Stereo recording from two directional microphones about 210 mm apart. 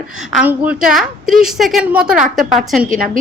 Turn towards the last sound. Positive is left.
turn(degrees=-40)  # may be behind; listen again after turning